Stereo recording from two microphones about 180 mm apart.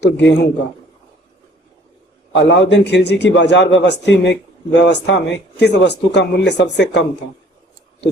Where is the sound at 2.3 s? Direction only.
75° left (ahead or behind).